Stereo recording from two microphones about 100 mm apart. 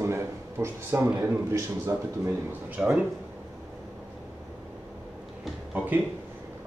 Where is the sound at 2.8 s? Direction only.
20° right (ahead or behind).